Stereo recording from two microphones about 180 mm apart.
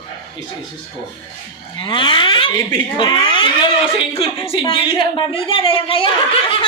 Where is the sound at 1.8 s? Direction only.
25° left (ahead or behind).